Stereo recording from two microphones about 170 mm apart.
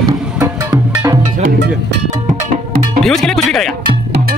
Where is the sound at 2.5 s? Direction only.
45° right (ahead or behind).